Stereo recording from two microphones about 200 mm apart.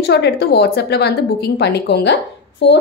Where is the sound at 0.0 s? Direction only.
55° left (ahead or behind).